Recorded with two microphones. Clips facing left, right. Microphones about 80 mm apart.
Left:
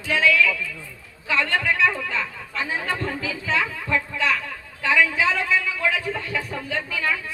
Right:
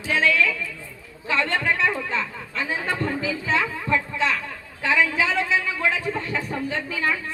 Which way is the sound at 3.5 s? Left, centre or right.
Right.